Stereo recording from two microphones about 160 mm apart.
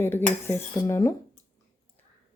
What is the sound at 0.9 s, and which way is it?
Speech, 20° left (ahead or behind).